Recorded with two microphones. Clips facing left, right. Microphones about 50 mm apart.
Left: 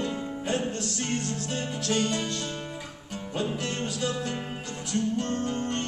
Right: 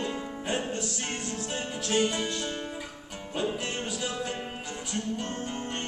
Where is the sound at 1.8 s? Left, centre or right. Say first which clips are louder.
Right 1 dB; centre.